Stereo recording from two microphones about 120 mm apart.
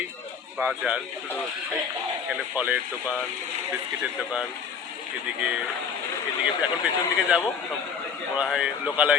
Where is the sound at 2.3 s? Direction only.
15° right (ahead or behind).